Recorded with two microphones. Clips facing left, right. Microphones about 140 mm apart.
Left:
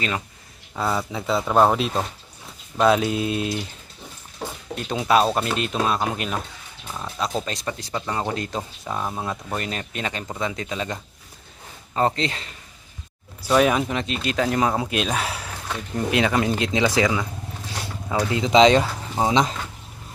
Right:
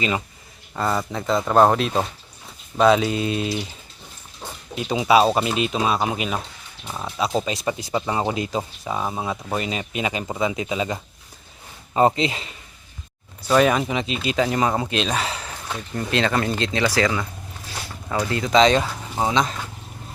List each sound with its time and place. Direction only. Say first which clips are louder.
0.8 s speech: right 1 dB; centre (ahead or behind)
4.7 s speech: right 3 dB; 5° right (ahead or behind)
13.5 s speech: right 1 dB; centre (ahead or behind); by 17.2 s 20° left (ahead or behind)
18.3 s speech: left 2 dB; 20° left (ahead or behind)
18.8 s speech: left 1 dB; 10° left (ahead or behind)
19.3 s speech: left 2 dB; 25° left (ahead or behind)